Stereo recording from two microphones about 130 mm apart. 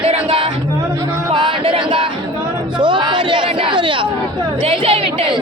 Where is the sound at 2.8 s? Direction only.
35° right (ahead or behind).